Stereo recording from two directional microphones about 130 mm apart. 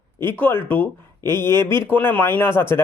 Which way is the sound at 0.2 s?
15° left (ahead or behind).